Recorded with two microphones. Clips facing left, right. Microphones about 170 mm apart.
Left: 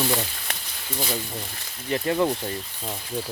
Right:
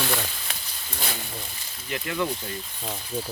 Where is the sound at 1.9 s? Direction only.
35° left (ahead or behind).